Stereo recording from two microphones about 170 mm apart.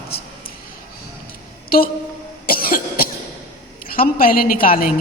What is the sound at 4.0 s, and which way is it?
Speech, 55° left (ahead or behind).